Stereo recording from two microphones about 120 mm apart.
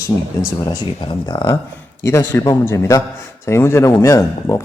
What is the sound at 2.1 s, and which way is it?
A man's voice, 20° left (ahead or behind).